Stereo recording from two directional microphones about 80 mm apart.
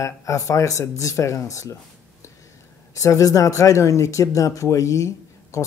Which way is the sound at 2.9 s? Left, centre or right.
Left.